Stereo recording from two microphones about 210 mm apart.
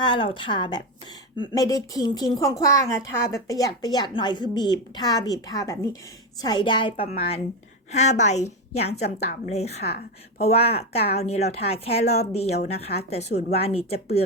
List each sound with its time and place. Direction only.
0.0 s a woman's voice: 25° left (ahead or behind)
9.8 s a woman's voice: 50° left (ahead or behind)
10.4 s a woman's voice: 30° left (ahead or behind)